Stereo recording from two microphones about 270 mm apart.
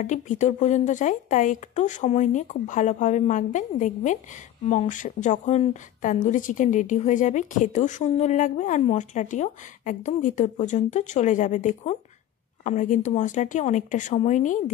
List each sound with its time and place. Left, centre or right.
0.0 s a woman's voice: left